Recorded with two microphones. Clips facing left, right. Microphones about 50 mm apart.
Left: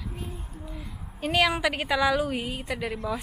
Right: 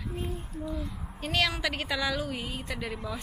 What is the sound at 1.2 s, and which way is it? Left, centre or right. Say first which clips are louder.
A woman's voice: left 5 dB; centre.